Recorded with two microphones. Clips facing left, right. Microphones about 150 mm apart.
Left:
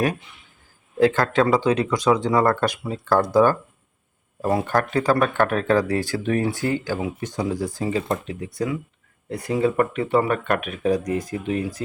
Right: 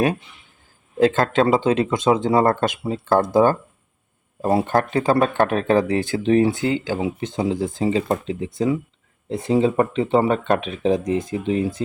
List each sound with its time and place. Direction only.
0.9 s speech: 20° right (ahead or behind)